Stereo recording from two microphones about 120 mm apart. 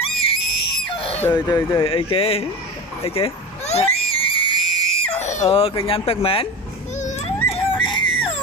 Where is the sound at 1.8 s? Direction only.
50° left (ahead or behind).